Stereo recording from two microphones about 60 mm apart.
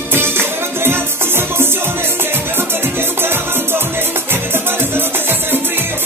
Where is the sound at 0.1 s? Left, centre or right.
Right.